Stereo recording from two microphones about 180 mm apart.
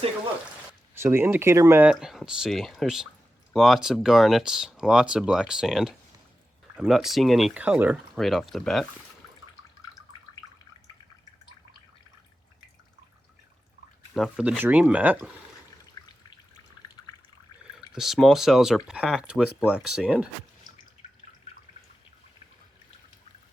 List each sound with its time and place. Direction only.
0.7 s speech: 15° right (ahead or behind)
14.1 s speech: 5° right (ahead or behind)
16.0 s drip: 20° left (ahead or behind)
17.7 s speech: centre (ahead or behind)